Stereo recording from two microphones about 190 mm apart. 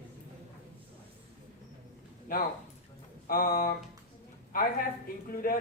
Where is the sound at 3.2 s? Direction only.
50° left (ahead or behind).